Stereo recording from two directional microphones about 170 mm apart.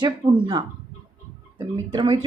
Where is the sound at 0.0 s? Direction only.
25° right (ahead or behind).